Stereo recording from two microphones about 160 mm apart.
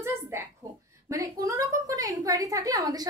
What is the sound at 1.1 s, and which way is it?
A woman's voice, 20° right (ahead or behind).